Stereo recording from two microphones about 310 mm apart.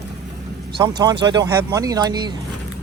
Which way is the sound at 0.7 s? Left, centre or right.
Centre.